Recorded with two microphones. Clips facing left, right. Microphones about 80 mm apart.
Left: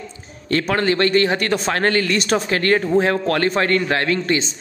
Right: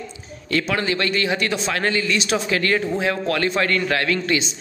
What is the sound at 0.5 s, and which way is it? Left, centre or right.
A man's voice, left.